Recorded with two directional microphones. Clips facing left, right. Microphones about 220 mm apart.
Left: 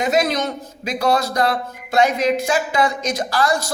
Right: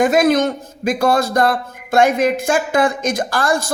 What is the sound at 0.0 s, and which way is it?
A man's voice, 50° right (ahead or behind).